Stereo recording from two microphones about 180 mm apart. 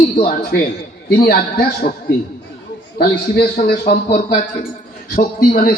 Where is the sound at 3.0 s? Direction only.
60° left (ahead or behind).